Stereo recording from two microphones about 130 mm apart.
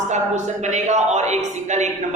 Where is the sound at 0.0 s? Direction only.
65° right (ahead or behind).